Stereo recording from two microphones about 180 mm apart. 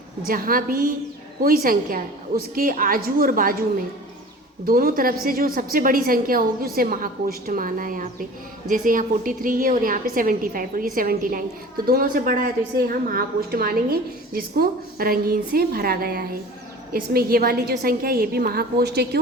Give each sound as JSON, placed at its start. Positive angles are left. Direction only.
{"t": 0.3, "sound": "a woman's voice", "side_deg": -55}
{"t": 4.6, "sound": "a woman's voice", "side_deg": -55}